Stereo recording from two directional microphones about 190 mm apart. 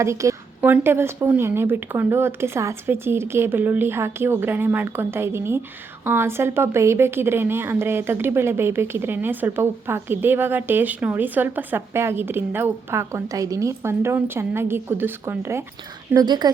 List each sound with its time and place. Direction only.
0.0 s a woman's voice: 15° right (ahead or behind)